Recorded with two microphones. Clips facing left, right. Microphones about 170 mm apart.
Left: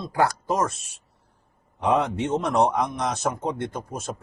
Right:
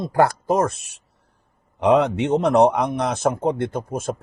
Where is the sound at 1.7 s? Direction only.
75° right (ahead or behind).